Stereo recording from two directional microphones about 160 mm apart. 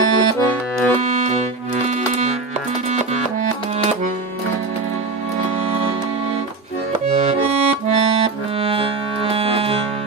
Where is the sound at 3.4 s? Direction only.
50° right (ahead or behind).